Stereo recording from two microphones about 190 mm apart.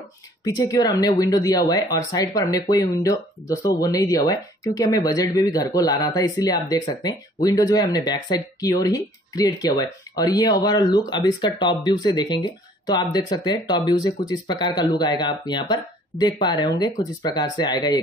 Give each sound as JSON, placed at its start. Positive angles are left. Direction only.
{"t": 0.4, "sound": "speech", "side_deg": 20}